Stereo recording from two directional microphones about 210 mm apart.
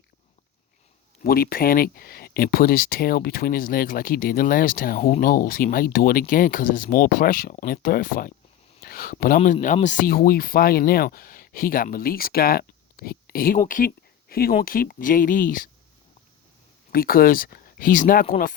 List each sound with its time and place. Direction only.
1.2 s speech: 45° left (ahead or behind)
8.8 s a sound: 45° left (ahead or behind)
9.2 s speech: 40° left (ahead or behind)
16.9 s speech: 45° left (ahead or behind)